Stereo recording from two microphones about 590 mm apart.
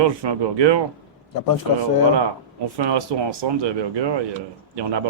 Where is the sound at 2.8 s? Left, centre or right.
Right.